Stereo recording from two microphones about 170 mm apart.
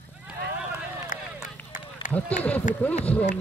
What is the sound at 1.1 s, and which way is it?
Run, 50° left (ahead or behind).